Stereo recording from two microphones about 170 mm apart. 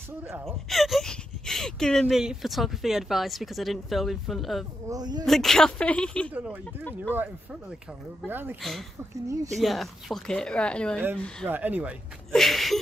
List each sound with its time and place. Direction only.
0.5 s speech: centre (ahead or behind)
4.8 s speech: 25° right (ahead or behind)
5.2 s speech: centre (ahead or behind)
6.3 s speech: 10° right (ahead or behind)
8.3 s speech: 10° right (ahead or behind)
9.6 s speech: centre (ahead or behind)
11.4 s speech: 10° right (ahead or behind)
12.3 s a sound: centre (ahead or behind)